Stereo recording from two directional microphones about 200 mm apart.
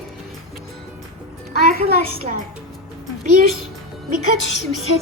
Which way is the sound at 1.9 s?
55° left (ahead or behind).